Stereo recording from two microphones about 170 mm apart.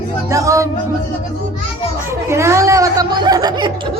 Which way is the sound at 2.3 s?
15° right (ahead or behind).